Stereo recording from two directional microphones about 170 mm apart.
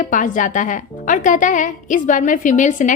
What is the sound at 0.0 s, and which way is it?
A woman's voice, 50° left (ahead or behind).